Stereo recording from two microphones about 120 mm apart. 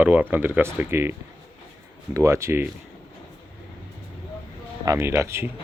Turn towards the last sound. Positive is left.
turn(degrees=-25)  # may be behind; listen again after turning